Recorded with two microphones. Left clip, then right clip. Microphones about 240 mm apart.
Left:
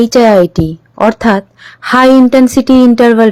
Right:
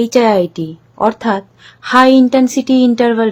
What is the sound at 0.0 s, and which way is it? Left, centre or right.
A woman's voice, left.